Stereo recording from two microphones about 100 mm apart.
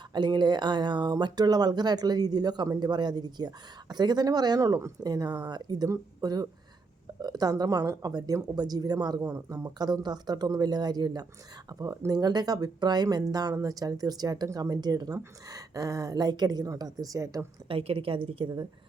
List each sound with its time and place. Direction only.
0.1 s speech: 45° right (ahead or behind)
17.7 s a woman's voice: 65° right (ahead or behind)